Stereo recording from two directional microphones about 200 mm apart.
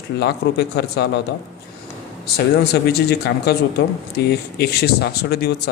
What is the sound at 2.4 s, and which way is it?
Speech, 55° left (ahead or behind).